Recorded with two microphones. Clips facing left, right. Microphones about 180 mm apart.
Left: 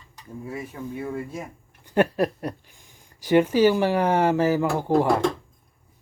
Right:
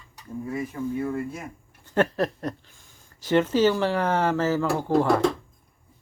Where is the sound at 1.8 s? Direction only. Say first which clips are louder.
Left 2 dB; 15° left (ahead or behind).